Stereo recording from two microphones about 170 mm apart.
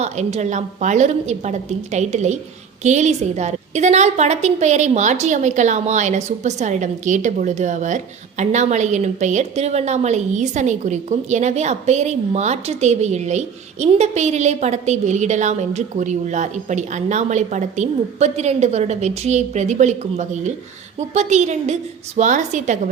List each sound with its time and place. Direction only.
0.0 s a woman's voice: 40° right (ahead or behind)